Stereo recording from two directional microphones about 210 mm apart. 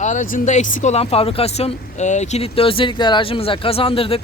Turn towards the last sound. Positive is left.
turn(degrees=25)  # may be behind; listen again after turning